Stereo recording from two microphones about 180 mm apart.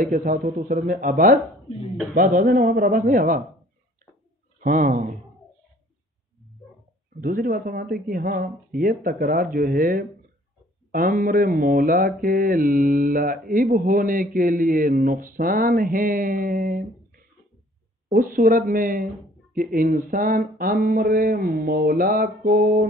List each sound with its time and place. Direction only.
0.0 s speech: 50° right (ahead or behind)
4.6 s speech: 45° right (ahead or behind)
7.2 s speech: 50° right (ahead or behind)